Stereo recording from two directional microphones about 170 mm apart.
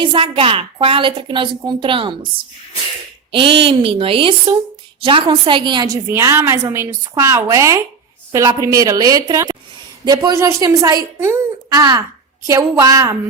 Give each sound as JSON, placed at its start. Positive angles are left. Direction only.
{"t": 0.0, "sound": "a woman's voice", "side_deg": -30}
{"t": 3.3, "sound": "a woman's voice", "side_deg": -30}